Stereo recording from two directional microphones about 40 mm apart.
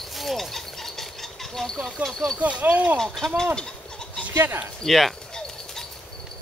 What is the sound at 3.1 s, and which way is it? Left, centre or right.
Speech, centre.